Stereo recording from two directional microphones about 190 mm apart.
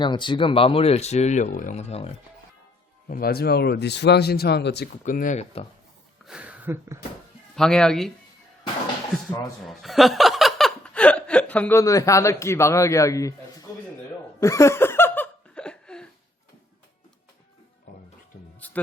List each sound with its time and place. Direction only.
0.0 s speech: 25° left (ahead or behind)
3.1 s speech: 50° left (ahead or behind)
5.0 s speech: 45° left (ahead or behind)
6.2 s speech: 5° right (ahead or behind)
7.5 s speech: 5° left (ahead or behind)
9.6 s speech: centre (ahead or behind); by 13.7 s 15° left (ahead or behind)
14.4 s a sound: 15° left (ahead or behind)
18.6 s a sound: 10° left (ahead or behind)